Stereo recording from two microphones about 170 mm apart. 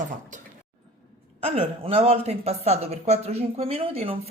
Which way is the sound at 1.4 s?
35° right (ahead or behind).